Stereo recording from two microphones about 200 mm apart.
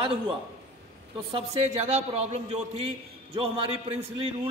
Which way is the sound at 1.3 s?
35° right (ahead or behind).